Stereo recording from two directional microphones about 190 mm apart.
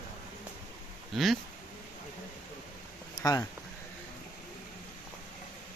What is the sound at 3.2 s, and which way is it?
Speech, 15° left (ahead or behind).